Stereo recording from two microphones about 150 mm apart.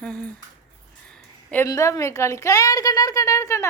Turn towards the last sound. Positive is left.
turn(degrees=20)  # may be behind; listen again after turning